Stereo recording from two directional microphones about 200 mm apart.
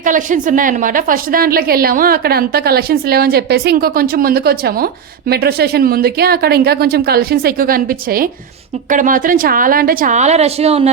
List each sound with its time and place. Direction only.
0.0 s a woman's voice: 40° right (ahead or behind)